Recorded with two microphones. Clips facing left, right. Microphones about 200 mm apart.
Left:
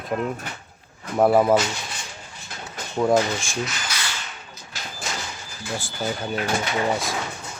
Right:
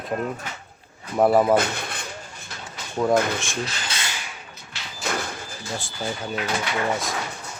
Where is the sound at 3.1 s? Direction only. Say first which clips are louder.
Even; 55° right (ahead or behind).